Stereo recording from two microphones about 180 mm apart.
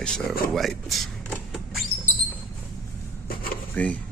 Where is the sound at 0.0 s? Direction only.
5° left (ahead or behind).